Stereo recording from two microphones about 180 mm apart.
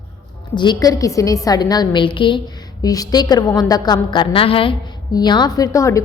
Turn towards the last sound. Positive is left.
turn(degrees=20)  # may be behind; listen again after turning